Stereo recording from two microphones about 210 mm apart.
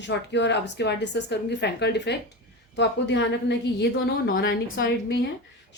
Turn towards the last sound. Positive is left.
turn(degrees=50)  # may be behind; listen again after turning